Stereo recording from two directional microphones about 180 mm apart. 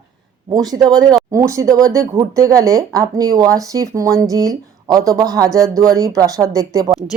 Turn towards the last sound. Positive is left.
turn(degrees=-20)  # may be behind; listen again after turning